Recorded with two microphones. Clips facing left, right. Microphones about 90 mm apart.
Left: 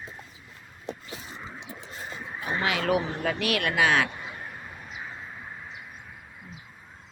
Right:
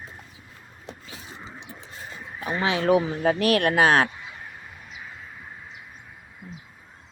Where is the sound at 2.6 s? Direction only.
25° right (ahead or behind); by 4.0 s 40° right (ahead or behind).